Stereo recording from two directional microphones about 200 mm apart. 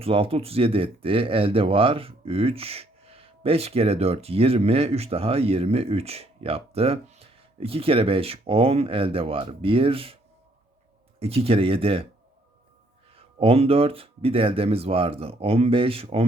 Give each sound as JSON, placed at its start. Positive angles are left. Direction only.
{"t": 0.0, "sound": "speech", "side_deg": -30}
{"t": 11.2, "sound": "speech", "side_deg": -30}
{"t": 13.1, "sound": "speech", "side_deg": -30}